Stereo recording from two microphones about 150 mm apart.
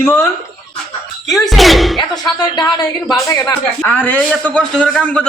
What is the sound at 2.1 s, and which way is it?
Speech, 25° left (ahead or behind).